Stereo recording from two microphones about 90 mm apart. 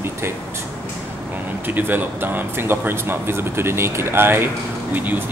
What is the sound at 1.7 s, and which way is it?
Speech, 20° right (ahead or behind).